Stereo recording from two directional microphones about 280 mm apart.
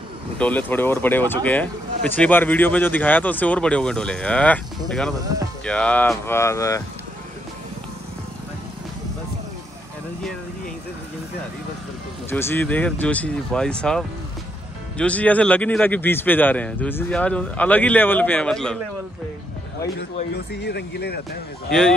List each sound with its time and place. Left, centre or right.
0.4 s speech: centre
5.1 s speech: centre
5.7 s speech: centre
12.3 s speech: centre
20.3 s speech: left
21.6 s speech: centre